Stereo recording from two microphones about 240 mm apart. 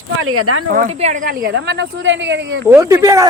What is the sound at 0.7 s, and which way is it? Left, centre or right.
Speech, right.